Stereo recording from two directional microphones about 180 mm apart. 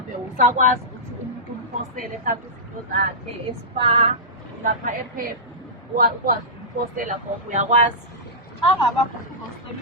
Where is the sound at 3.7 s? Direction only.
30° right (ahead or behind).